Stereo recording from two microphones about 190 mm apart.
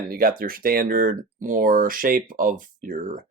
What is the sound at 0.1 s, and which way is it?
Speech, 50° right (ahead or behind).